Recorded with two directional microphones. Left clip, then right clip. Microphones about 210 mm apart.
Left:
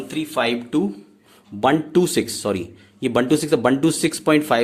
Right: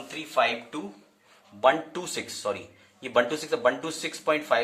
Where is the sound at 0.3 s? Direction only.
55° left (ahead or behind).